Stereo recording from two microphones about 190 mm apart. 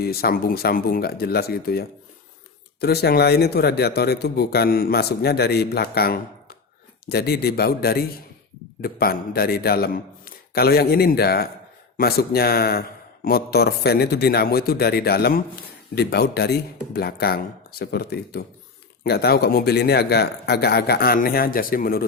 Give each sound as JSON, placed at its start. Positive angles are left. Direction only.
{"t": 0.0, "sound": "speech", "side_deg": 55}